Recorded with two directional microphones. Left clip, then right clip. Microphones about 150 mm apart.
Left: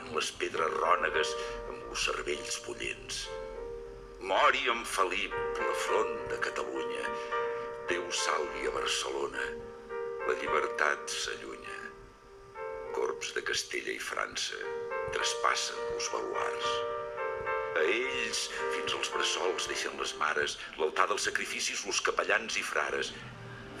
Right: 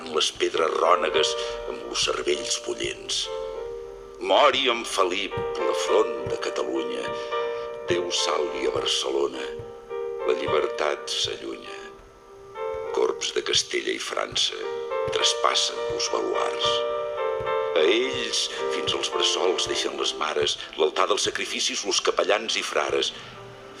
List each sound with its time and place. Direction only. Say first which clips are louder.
0.1 s speech: right 10 dB; 25° right (ahead or behind)
12.6 s speech: right 9 dB; 25° right (ahead or behind)